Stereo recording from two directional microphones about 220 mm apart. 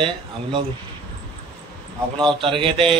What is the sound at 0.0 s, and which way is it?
Speech, 25° right (ahead or behind).